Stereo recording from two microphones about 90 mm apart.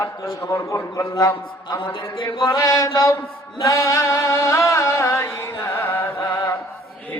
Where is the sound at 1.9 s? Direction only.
65° left (ahead or behind).